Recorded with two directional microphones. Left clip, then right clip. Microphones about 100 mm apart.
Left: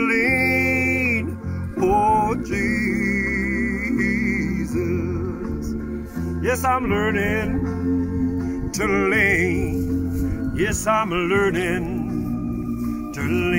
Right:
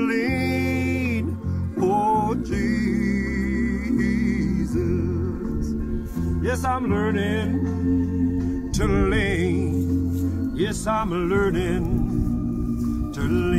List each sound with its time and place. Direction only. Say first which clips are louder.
0.0 s music: left 5 dB; 5° right (ahead or behind)
6.4 s music: left 4 dB; centre (ahead or behind)
8.8 s music: left 5 dB; 5° left (ahead or behind)
13.3 s music: left 2 dB; 35° left (ahead or behind)